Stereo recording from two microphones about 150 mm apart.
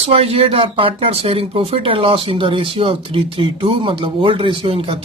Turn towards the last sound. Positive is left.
turn(degrees=-40)  # may be behind; listen again after turning